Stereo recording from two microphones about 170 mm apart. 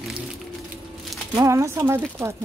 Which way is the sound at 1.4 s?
15° right (ahead or behind).